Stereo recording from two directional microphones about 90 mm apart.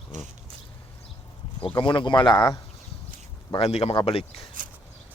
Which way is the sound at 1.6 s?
75° left (ahead or behind).